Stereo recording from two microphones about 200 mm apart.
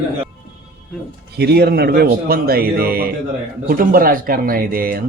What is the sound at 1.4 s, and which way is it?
A man's voice, 55° right (ahead or behind).